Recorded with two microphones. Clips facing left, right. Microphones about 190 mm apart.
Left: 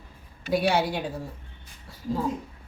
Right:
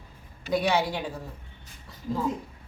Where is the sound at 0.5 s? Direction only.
10° left (ahead or behind).